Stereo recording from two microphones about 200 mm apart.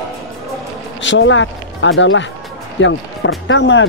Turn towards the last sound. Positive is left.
turn(degrees=70)  # may be behind; listen again after turning